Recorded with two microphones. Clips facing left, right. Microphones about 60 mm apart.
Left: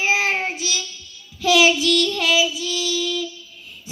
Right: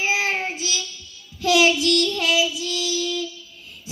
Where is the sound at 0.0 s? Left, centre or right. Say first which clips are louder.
Left 2 dB; centre.